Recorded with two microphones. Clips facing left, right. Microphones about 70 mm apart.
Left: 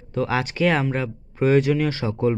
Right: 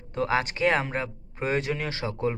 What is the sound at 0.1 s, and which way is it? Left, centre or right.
Speech, right.